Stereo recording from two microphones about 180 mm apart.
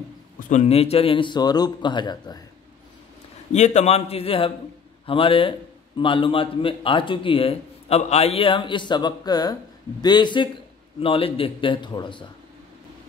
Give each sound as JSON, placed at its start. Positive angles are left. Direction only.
{"t": 0.5, "sound": "a man's voice", "side_deg": 35}
{"t": 3.5, "sound": "a man's voice", "side_deg": 40}